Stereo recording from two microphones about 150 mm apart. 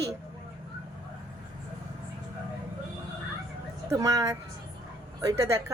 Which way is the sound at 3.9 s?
25° right (ahead or behind).